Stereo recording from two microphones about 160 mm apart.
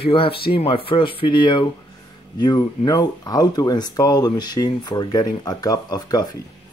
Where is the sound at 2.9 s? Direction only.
25° left (ahead or behind).